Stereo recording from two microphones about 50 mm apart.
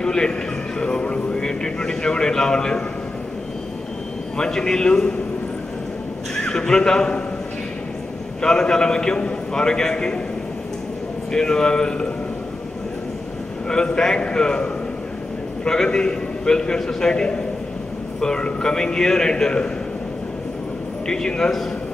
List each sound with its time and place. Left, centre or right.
0.0 s a man's voice: centre
4.4 s speech: centre
6.4 s speech: centre
8.4 s speech: centre
11.3 s speech: centre
13.7 s speech: centre
21.1 s speech: centre